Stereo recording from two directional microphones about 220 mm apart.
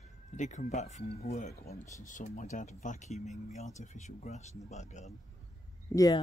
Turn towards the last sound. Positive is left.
turn(degrees=15)  # may be behind; listen again after turning